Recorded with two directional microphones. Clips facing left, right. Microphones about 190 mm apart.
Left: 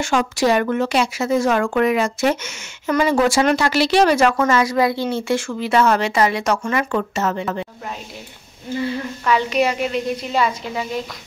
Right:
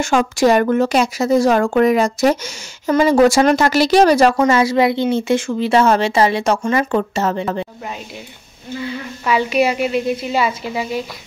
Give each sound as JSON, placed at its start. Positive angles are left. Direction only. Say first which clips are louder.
{"t": 0.0, "sound": "a woman's voice", "louder": "right 4 dB", "side_deg": -45}
{"t": 9.2, "sound": "a woman's voice", "louder": "right 2 dB", "side_deg": -10}